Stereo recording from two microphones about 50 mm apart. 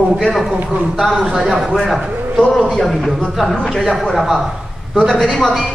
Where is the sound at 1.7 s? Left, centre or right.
Centre.